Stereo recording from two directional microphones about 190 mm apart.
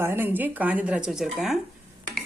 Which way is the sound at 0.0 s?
10° right (ahead or behind).